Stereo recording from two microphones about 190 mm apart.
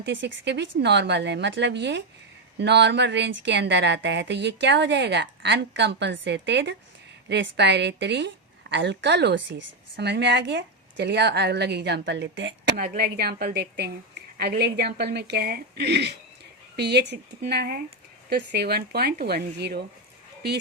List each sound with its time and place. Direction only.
0.0 s speech: 70° right (ahead or behind)
12.7 s speech: 50° right (ahead or behind)